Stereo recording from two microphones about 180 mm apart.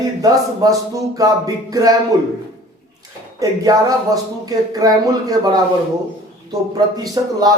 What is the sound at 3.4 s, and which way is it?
Speech, 20° right (ahead or behind).